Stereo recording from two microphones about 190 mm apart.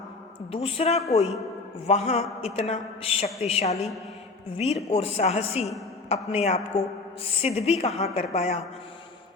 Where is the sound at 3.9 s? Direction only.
Centre (ahead or behind).